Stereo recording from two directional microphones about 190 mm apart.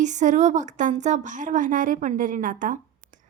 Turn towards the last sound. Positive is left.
turn(degrees=-45)  # may be behind; listen again after turning